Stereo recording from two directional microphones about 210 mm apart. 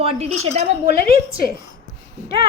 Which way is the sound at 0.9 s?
45° left (ahead or behind).